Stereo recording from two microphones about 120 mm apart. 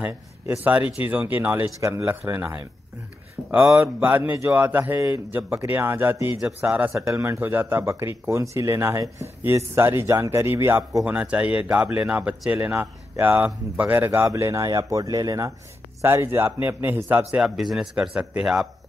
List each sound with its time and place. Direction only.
0.0 s speech: 15° right (ahead or behind)
11.1 s speech: 10° right (ahead or behind)